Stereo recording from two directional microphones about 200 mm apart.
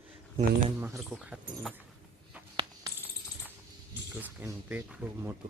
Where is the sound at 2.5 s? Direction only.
25° right (ahead or behind).